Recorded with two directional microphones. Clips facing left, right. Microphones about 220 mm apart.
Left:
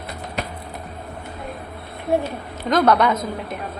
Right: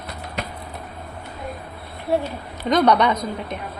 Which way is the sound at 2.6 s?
Centre (ahead or behind).